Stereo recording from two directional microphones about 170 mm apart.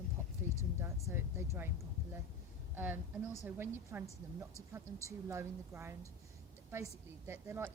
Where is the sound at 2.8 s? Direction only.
10° right (ahead or behind).